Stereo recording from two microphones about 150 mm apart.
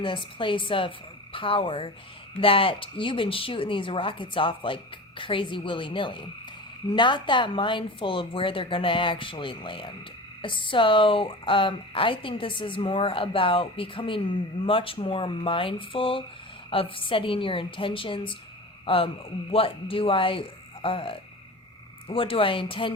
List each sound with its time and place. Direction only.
0.0 s speech: 35° left (ahead or behind)